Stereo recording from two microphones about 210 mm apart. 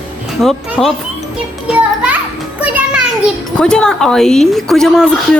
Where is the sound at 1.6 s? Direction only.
5° right (ahead or behind).